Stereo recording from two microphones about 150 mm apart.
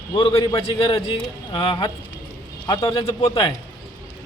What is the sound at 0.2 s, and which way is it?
A man's voice, 35° left (ahead or behind).